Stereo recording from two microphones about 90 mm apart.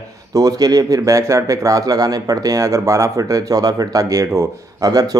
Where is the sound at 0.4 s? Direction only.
45° right (ahead or behind).